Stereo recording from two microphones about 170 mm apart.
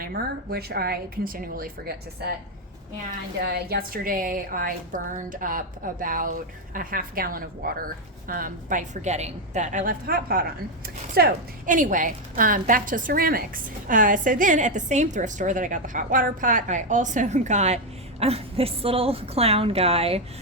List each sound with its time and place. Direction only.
0.0 s a woman's voice: 65° right (ahead or behind)
3.4 s a woman's voice: 70° right (ahead or behind); by 20.2 s 35° right (ahead or behind)